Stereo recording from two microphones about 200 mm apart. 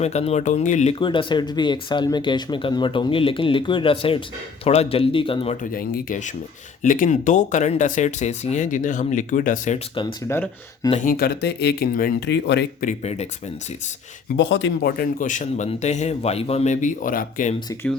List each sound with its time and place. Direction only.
0.0 s a man's voice: 35° left (ahead or behind)
0.9 s speech: 25° left (ahead or behind)
5.7 s a man's voice: 45° left (ahead or behind)
9.9 s speech: 25° left (ahead or behind)
10.2 s speech: 10° left (ahead or behind)
11.0 s speech: 50° left (ahead or behind)
12.8 s a man's voice: 35° left (ahead or behind)
14.3 s a man's voice: 65° left (ahead or behind); by 17.5 s 45° left (ahead or behind)